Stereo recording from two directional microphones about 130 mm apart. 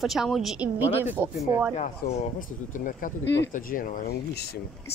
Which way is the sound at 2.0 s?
90° left.